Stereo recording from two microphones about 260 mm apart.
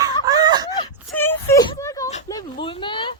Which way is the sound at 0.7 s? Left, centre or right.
Centre.